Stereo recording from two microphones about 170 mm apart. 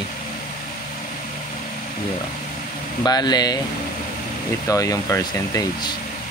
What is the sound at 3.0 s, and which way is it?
Speech, 25° left (ahead or behind).